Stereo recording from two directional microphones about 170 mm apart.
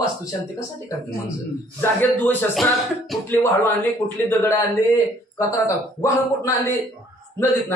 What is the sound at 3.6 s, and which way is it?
Speech, 10° left (ahead or behind).